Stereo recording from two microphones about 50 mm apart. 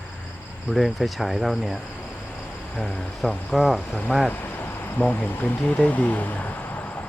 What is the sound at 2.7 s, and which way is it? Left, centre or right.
Speech, centre.